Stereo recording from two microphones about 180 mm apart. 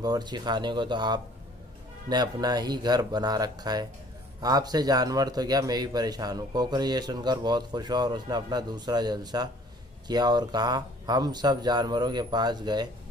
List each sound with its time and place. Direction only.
0.0 s a man's voice: 20° right (ahead or behind)